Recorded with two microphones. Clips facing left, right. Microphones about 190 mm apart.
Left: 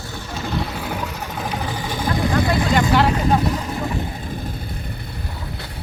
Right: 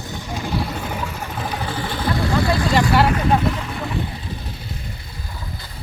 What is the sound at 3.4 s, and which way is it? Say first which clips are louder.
Vehicle: left 1 dB; 40° left (ahead or behind).